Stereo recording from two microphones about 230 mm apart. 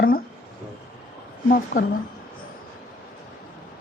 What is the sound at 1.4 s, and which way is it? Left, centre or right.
Speech, left.